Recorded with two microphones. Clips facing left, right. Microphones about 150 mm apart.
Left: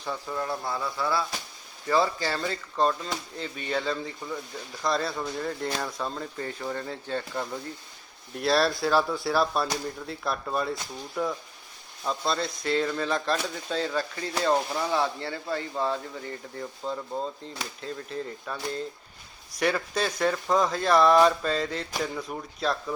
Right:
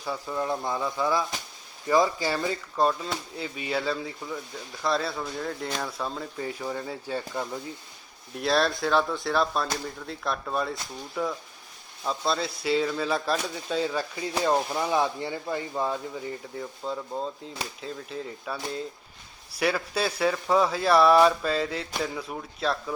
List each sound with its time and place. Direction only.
0.0 s speech: 10° right (ahead or behind)
16.6 s speech: centre (ahead or behind)